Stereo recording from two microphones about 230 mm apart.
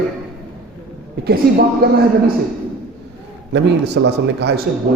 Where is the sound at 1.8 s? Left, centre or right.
Right.